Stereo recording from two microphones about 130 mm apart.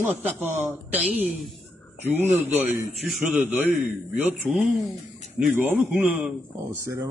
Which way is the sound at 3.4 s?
15° right (ahead or behind).